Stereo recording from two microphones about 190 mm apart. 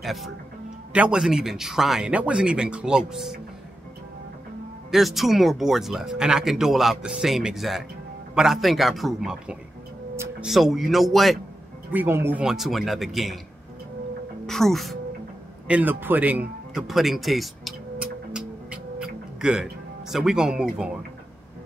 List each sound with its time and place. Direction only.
0.0 s speech: centre (ahead or behind)
4.9 s speech: centre (ahead or behind)
11.9 s speech: 10° right (ahead or behind)
14.4 s speech: centre (ahead or behind)
15.7 s speech: 10° right (ahead or behind)
18.3 s music: 5° right (ahead or behind)
19.4 s speech: 5° right (ahead or behind)